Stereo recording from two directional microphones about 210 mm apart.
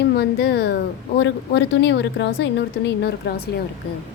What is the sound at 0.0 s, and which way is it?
Speech, 50° left (ahead or behind).